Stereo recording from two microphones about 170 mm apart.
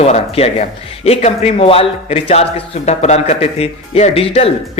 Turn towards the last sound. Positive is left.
turn(degrees=35)  # may be behind; listen again after turning